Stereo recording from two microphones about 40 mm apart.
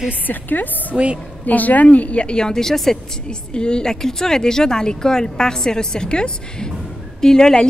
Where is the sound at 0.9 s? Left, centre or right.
Right.